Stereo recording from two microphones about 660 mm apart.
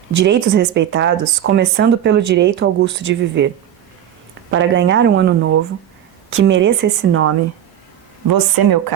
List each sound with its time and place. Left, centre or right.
0.2 s speech: centre
4.5 s speech: centre
8.3 s speech: right